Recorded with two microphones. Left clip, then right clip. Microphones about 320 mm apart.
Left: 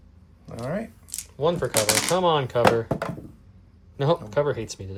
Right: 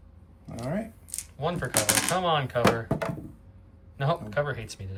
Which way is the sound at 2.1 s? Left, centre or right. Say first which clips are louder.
Left 4 dB; centre.